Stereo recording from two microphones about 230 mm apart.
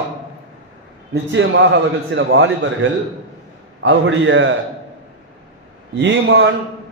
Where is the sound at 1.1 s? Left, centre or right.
Right.